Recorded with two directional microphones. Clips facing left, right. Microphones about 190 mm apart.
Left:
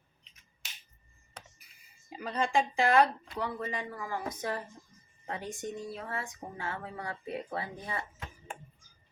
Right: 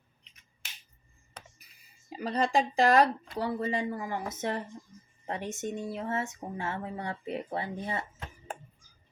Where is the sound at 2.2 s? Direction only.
35° right (ahead or behind).